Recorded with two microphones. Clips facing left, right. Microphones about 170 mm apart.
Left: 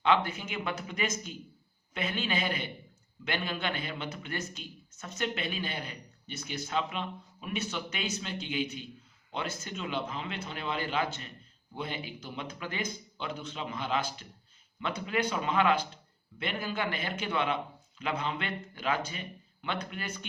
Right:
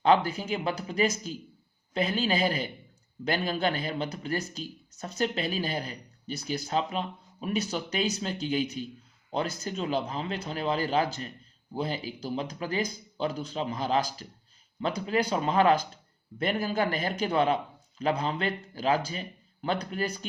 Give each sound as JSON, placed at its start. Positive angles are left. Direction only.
{"t": 0.0, "sound": "a man's voice", "side_deg": -35}